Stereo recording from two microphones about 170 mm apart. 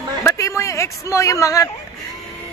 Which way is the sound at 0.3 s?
20° left (ahead or behind).